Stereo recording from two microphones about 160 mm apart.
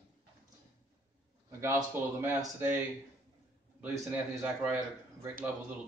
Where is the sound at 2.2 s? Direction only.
10° right (ahead or behind).